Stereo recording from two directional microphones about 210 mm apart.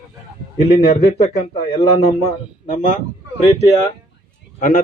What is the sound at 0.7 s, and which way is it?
A man's voice, 30° left (ahead or behind).